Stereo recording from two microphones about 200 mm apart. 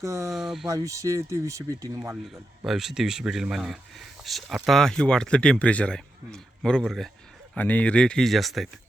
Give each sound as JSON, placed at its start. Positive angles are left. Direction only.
{"t": 0.0, "sound": "speech", "side_deg": -15}
{"t": 0.3, "sound": "speech", "side_deg": 0}
{"t": 0.7, "sound": "speech", "side_deg": -15}
{"t": 2.6, "sound": "speech", "side_deg": 0}